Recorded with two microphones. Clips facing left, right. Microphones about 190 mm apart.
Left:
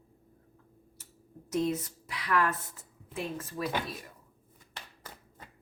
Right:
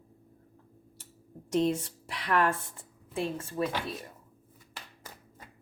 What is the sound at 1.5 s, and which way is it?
A woman's voice, 30° right (ahead or behind).